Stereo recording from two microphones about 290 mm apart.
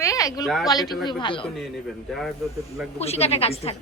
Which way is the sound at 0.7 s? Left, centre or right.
Centre.